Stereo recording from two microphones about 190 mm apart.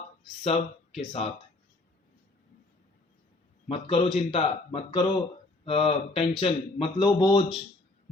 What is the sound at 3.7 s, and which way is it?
A man's voice, 30° left (ahead or behind).